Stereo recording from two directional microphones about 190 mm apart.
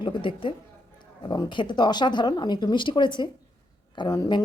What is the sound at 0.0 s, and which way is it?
Speech, 25° left (ahead or behind).